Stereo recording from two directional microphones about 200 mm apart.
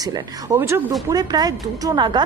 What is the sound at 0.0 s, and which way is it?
Speech, 20° right (ahead or behind).